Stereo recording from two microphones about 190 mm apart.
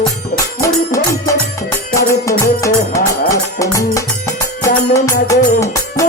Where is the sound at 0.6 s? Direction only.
15° left (ahead or behind).